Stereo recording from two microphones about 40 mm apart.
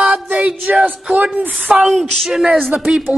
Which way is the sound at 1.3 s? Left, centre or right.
Right.